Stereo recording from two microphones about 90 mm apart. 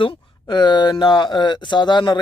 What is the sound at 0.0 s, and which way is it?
Speech, 55° left (ahead or behind).